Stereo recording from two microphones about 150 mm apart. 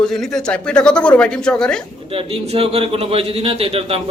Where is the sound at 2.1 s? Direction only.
40° right (ahead or behind).